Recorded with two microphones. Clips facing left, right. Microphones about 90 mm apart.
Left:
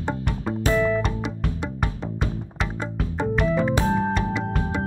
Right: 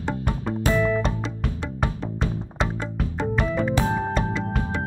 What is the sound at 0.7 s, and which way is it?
Music, 5° left (ahead or behind).